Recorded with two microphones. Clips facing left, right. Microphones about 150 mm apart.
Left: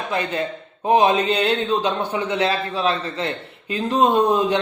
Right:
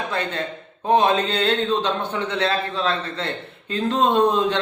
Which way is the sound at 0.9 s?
10° left (ahead or behind).